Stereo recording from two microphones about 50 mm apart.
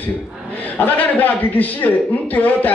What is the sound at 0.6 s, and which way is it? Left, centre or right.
A man's voice, left.